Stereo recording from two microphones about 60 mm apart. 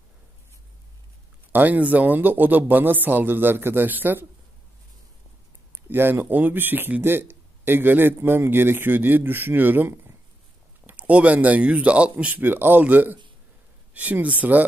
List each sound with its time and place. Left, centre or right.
1.5 s speech: right
5.9 s speech: right
10.9 s speech: right
12.4 s speech: right